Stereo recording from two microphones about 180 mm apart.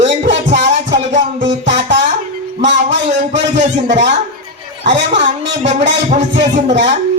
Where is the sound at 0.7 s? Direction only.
40° right (ahead or behind).